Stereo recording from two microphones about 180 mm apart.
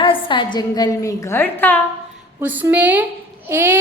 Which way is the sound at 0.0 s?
30° left (ahead or behind).